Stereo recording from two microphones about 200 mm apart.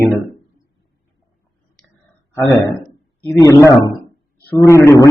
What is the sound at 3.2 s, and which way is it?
A man's voice, 15° left (ahead or behind).